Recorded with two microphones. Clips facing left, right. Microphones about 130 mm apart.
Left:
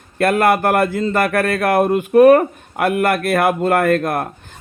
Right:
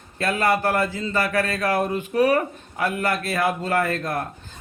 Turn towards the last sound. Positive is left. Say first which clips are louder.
# left 8 dB
turn(degrees=60)  # may be behind; listen again after turning